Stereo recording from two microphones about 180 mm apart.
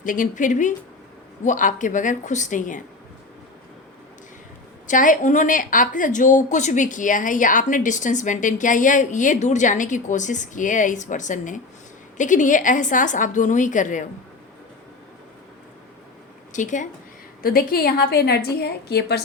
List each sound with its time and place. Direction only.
0.0 s a woman's voice: 50° left (ahead or behind)
4.9 s a woman's voice: 45° left (ahead or behind)
16.5 s a woman's voice: 45° left (ahead or behind)
17.4 s a woman's voice: 55° left (ahead or behind)